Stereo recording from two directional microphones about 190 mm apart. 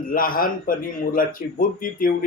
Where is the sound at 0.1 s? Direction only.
50° left (ahead or behind).